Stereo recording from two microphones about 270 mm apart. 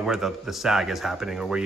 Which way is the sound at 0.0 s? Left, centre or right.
Centre.